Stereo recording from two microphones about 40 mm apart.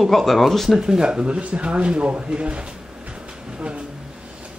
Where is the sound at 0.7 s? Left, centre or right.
Centre.